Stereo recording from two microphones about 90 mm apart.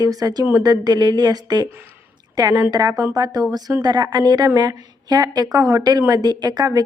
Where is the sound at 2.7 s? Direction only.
50° right (ahead or behind).